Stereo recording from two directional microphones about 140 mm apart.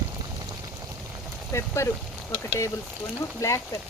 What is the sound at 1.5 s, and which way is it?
Speech, 20° left (ahead or behind).